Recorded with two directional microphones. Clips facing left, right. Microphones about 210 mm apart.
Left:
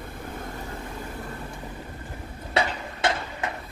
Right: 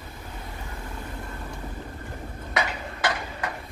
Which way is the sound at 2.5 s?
25° left (ahead or behind).